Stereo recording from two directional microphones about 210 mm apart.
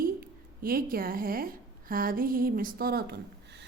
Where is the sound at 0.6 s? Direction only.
45° right (ahead or behind).